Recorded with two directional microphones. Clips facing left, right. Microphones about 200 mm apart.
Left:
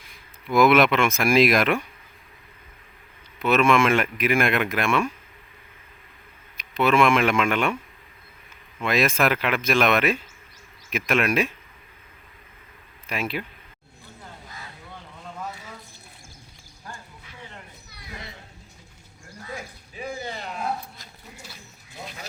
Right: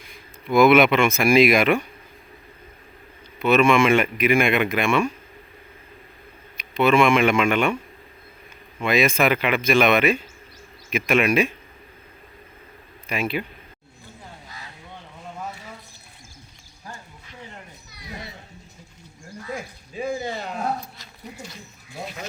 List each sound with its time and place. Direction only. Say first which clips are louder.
0.4 s speech: right 3 dB; centre (ahead or behind)
3.4 s speech: right 2 dB; centre (ahead or behind)
6.6 s speech: right 2 dB; centre (ahead or behind)
8.8 s speech: right 2 dB; centre (ahead or behind)
13.1 s speech: right 3 dB; centre (ahead or behind)
20.3 s a sound: right 4 dB; 40° right (ahead or behind)